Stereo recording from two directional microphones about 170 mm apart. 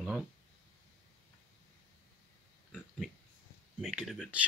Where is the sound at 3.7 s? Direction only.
Centre (ahead or behind).